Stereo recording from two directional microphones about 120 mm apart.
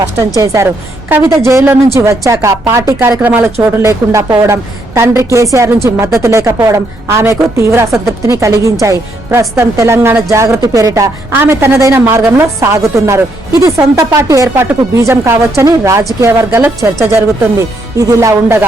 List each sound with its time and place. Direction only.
0.3 s a woman's voice: 25° right (ahead or behind)
3.2 s a woman's voice: 15° right (ahead or behind)
17.9 s a woman's voice: 25° right (ahead or behind)